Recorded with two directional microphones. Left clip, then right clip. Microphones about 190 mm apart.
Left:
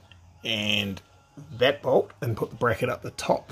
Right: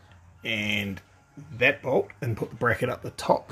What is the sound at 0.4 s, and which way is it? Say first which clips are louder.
Speech: left 2 dB; 5° left (ahead or behind).